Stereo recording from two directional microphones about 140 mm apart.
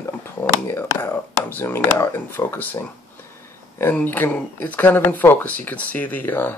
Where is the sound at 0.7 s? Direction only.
15° left (ahead or behind).